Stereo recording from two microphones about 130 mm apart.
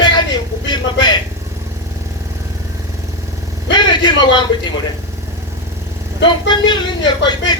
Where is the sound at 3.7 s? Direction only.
35° left (ahead or behind).